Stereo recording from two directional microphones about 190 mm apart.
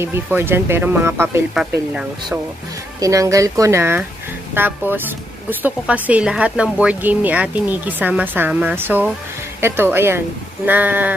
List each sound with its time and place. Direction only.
0.0 s speech: 10° right (ahead or behind)
3.0 s speech: 15° right (ahead or behind)